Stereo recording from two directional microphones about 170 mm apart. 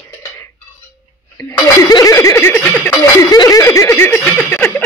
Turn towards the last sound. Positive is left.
turn(degrees=10)  # may be behind; listen again after turning